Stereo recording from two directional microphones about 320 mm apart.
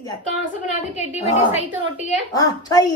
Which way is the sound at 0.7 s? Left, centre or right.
Left.